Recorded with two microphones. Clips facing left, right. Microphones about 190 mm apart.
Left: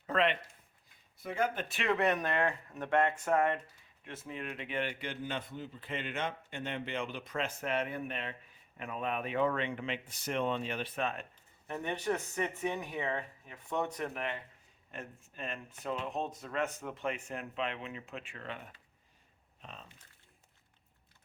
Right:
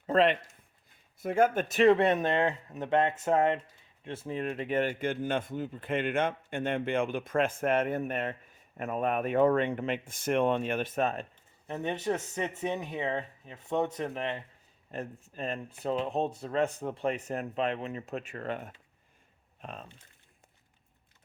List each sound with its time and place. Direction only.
0.1 s speech: 35° right (ahead or behind)
1.2 s speech: 50° right (ahead or behind)
11.7 s speech: 20° right (ahead or behind); by 19.9 s 55° right (ahead or behind)